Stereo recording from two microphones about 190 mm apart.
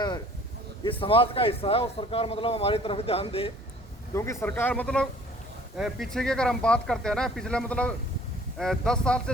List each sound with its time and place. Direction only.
0.9 s speech: 30° left (ahead or behind)
4.1 s speech: 15° left (ahead or behind)